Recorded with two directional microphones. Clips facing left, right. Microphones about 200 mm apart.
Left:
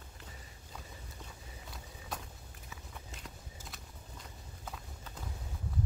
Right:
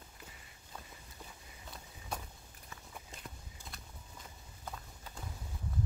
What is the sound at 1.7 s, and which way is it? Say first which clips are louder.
Vehicle: right 1 dB; centre (ahead or behind).